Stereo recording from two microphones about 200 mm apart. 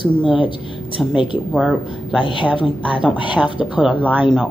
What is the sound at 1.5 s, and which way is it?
Speech, centre (ahead or behind).